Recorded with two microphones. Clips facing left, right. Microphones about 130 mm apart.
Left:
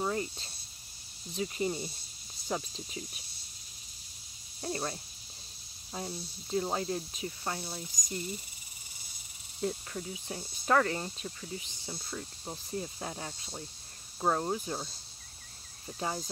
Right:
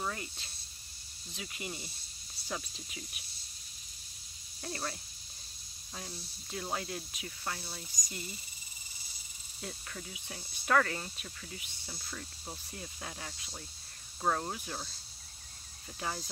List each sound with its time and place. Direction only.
0.0 s snake: 30° left (ahead or behind)
1.3 s speech: 35° left (ahead or behind)
4.6 s speech: 25° left (ahead or behind)
5.9 s speech: 25° left (ahead or behind)
9.6 s speech: 25° left (ahead or behind)
16.0 s speech: 20° left (ahead or behind)